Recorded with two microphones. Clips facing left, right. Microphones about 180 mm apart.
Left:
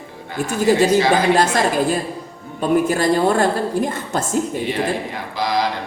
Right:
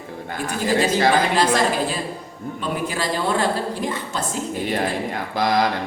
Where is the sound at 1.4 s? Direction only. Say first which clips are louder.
Left 2 dB; 45° left (ahead or behind).